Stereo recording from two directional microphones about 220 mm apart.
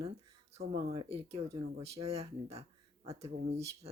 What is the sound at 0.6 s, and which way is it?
Speech, 45° right (ahead or behind).